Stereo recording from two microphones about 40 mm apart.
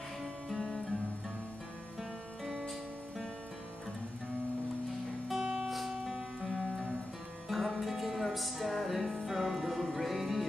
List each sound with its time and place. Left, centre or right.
0.2 s music: centre
5.4 s music: centre